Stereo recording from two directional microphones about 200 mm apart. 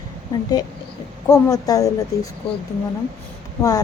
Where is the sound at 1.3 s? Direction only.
20° left (ahead or behind).